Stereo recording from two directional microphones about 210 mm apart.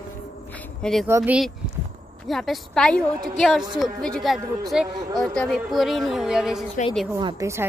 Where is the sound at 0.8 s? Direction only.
Centre (ahead or behind).